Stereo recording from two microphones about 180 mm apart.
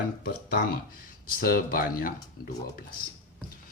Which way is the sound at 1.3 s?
50° left (ahead or behind).